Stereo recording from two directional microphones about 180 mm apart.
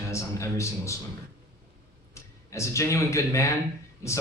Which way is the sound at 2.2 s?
15° left (ahead or behind).